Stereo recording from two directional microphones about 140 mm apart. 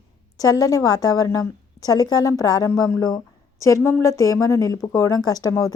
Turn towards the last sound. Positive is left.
turn(degrees=25)  # may be behind; listen again after turning